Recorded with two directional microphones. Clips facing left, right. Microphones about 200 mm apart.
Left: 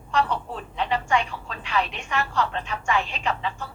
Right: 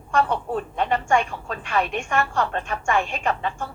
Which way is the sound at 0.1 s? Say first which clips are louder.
Right 3 dB; 50° right (ahead or behind).